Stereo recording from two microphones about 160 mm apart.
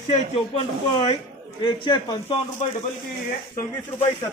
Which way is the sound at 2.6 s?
45° left (ahead or behind).